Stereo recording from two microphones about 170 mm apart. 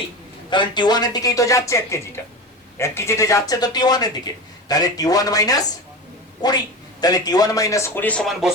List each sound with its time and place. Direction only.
0.5 s speech: 25° left (ahead or behind)
7.0 s a man's voice: 20° left (ahead or behind); by 8.5 s centre (ahead or behind)